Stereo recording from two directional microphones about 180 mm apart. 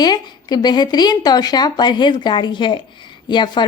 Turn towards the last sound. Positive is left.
turn(degrees=25)  # may be behind; listen again after turning